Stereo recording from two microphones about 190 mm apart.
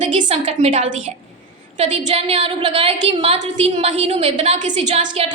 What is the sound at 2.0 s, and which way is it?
A woman's voice, 30° right (ahead or behind).